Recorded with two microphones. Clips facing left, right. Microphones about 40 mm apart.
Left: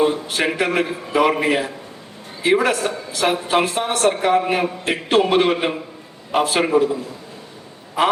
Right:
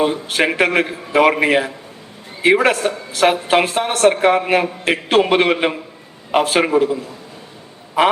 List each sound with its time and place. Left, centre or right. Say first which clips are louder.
0.0 s a man's voice: right 1 dB; right